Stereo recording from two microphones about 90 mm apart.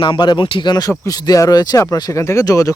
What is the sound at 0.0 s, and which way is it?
Speech, 70° left (ahead or behind).